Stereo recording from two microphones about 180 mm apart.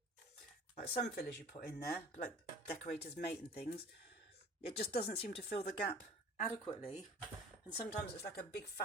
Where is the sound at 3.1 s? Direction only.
65° left (ahead or behind).